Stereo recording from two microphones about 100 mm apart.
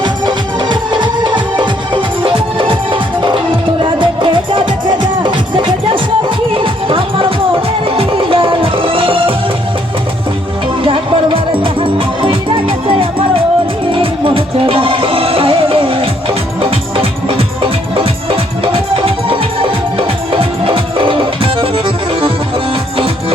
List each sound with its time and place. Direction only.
0.0 s music: 50° right (ahead or behind)
11.6 s music: 60° right (ahead or behind)